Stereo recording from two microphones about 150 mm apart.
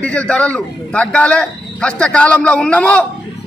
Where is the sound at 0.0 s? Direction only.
10° left (ahead or behind).